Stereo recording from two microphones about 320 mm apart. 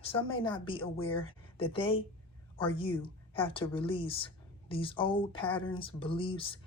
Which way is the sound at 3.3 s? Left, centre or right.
Centre.